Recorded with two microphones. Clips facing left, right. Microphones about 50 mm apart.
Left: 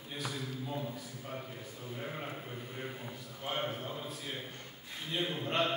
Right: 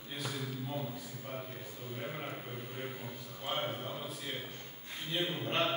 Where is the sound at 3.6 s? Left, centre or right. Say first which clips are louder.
Even; centre.